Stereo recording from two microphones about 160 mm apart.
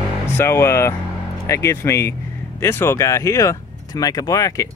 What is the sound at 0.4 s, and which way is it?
Speech, 15° left (ahead or behind).